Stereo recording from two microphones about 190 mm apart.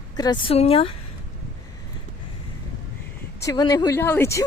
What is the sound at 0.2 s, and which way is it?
Speech, 25° left (ahead or behind).